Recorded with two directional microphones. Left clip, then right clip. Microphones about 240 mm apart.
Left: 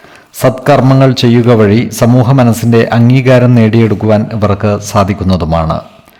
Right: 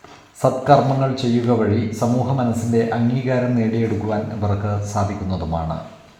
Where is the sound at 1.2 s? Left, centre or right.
Left.